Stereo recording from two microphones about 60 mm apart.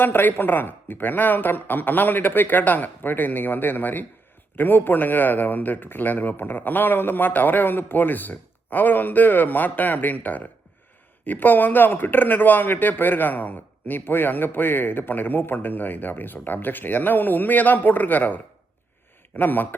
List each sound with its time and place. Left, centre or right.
0.0 s speech: left
19.4 s speech: left